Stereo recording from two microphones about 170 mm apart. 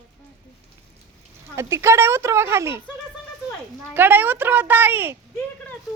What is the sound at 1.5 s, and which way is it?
Speech, 15° right (ahead or behind).